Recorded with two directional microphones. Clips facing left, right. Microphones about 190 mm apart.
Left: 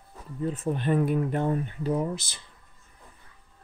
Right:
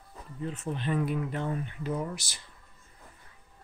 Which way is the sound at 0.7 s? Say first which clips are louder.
Left 5 dB; 50° left (ahead or behind).